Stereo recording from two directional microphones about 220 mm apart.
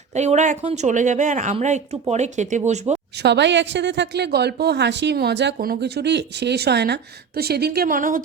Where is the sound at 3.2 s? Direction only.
50° right (ahead or behind).